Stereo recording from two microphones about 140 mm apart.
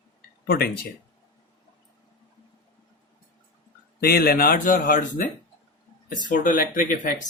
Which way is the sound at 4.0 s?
90° left.